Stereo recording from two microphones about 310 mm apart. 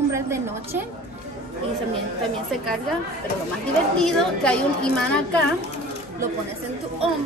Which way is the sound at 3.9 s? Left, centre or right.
Centre.